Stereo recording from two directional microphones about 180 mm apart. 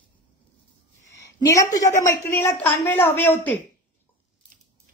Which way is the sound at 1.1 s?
15° left (ahead or behind).